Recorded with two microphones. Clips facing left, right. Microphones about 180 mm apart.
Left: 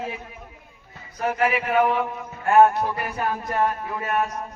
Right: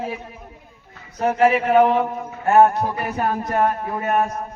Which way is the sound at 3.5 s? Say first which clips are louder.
Right 3 dB; 40° right (ahead or behind).